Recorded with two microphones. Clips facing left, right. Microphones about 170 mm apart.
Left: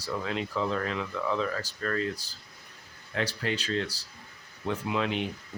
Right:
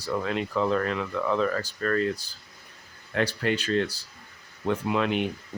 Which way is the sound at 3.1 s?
55° right (ahead or behind).